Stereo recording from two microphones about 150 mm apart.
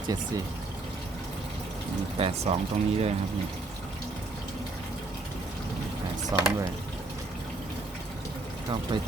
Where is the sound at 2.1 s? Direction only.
40° right (ahead or behind).